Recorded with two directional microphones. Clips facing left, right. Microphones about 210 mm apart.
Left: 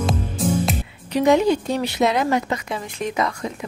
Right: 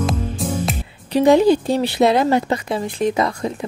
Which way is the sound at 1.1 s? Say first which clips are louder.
Right 4 dB; 30° right (ahead or behind).